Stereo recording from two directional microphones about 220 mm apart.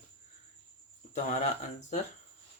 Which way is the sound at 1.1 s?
30° left (ahead or behind).